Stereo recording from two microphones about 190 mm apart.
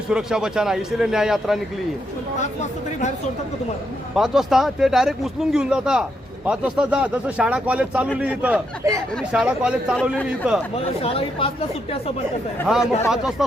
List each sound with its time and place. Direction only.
0.1 s speech: 5° right (ahead or behind)
2.4 s speech: 40° left (ahead or behind)
4.1 s speech: centre (ahead or behind)
10.8 s speech: 30° left (ahead or behind)
12.7 s speech: 5° right (ahead or behind)